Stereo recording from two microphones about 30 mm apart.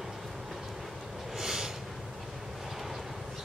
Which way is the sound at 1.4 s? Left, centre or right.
Centre.